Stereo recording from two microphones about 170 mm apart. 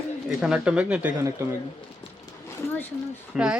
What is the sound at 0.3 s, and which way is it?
Speech, 5° right (ahead or behind).